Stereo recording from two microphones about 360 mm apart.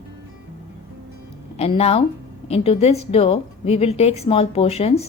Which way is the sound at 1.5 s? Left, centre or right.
Centre.